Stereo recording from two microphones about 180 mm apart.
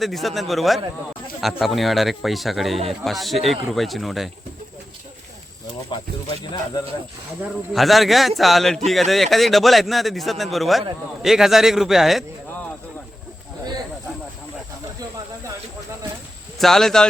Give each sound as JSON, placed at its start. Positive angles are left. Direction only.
{"t": 0.0, "sound": "a man's voice", "side_deg": 0}
{"t": 7.7, "sound": "a man's voice", "side_deg": 0}
{"t": 16.6, "sound": "a man's voice", "side_deg": 0}